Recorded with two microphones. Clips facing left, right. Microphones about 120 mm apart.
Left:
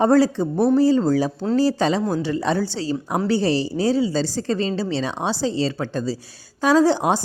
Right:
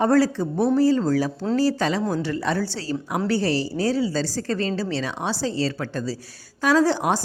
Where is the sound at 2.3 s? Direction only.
20° left (ahead or behind).